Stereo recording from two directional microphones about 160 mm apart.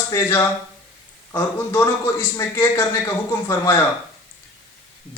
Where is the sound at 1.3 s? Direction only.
20° left (ahead or behind).